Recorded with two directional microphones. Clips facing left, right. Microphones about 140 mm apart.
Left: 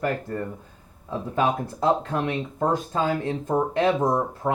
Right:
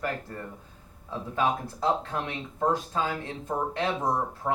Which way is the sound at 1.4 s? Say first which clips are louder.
Left 4 dB; 50° left (ahead or behind).